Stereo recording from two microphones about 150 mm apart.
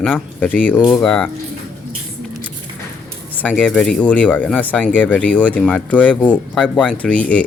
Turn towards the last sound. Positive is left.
turn(degrees=10)  # may be behind; listen again after turning